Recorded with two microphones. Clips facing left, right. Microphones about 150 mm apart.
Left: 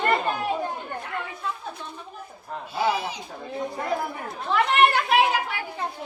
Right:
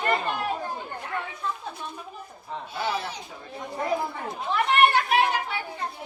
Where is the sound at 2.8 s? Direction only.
15° left (ahead or behind).